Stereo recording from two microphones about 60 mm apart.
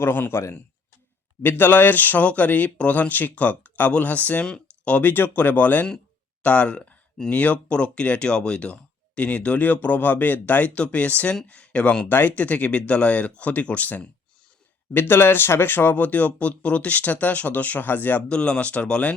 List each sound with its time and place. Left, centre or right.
0.0 s a man's voice: left
5.1 s speech: left
12.0 s speech: left
14.9 s speech: left
18.3 s speech: centre